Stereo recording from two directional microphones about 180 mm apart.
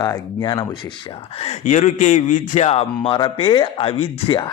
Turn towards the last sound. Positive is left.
turn(degrees=25)  # may be behind; listen again after turning